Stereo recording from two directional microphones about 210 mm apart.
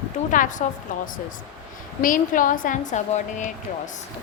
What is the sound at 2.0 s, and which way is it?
A woman's voice, 40° left (ahead or behind).